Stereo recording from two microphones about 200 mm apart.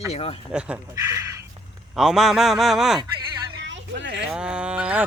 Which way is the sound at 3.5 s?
60° right (ahead or behind).